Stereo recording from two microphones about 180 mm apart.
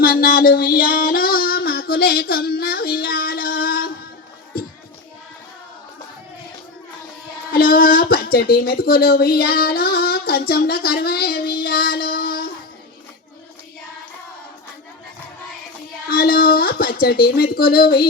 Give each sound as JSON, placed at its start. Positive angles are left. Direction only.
{"t": 0.0, "sound": "a sound", "side_deg": 55}
{"t": 7.5, "sound": "speech", "side_deg": 55}
{"t": 16.0, "sound": "speech", "side_deg": 55}